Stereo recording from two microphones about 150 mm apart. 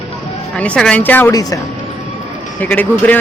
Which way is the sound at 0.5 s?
5° left (ahead or behind).